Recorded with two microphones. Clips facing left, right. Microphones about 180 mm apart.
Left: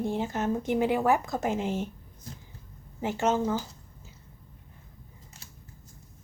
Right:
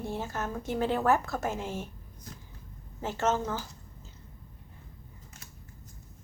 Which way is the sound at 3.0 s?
15° left (ahead or behind).